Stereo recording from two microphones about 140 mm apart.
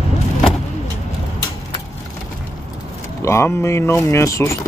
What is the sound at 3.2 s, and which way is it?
Speech, 20° left (ahead or behind).